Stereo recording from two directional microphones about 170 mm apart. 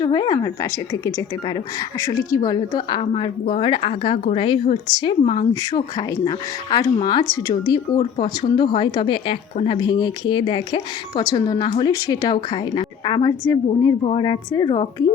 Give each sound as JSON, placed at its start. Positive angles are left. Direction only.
{"t": 0.0, "sound": "a woman's voice", "side_deg": 25}